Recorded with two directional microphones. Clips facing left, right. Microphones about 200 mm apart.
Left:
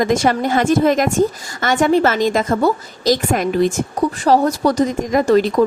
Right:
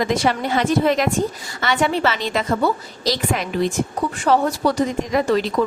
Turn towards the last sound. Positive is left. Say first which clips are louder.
# left 5 dB
turn(degrees=45)  # may be behind; listen again after turning